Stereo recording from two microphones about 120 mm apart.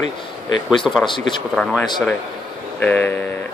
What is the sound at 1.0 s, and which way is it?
Speech, 40° left (ahead or behind).